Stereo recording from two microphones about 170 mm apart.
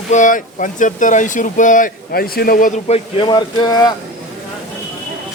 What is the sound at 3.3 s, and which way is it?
Speech, 25° left (ahead or behind).